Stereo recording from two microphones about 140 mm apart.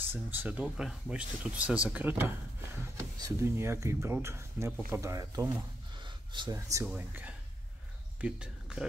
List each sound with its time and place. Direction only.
0.0 s speech: 15° right (ahead or behind)
5.9 s a sound: 35° right (ahead or behind)
6.5 s speech: 20° right (ahead or behind)
6.9 s speech: 10° right (ahead or behind)